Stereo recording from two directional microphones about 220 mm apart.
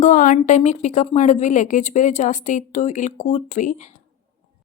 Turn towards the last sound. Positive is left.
turn(degrees=35)  # may be behind; listen again after turning